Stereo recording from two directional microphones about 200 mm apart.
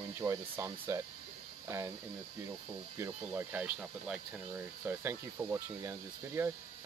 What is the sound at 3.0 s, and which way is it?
Speech, 10° right (ahead or behind).